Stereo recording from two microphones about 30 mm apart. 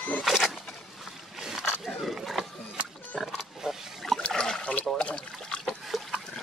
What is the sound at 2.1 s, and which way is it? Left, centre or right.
Wild animals, centre.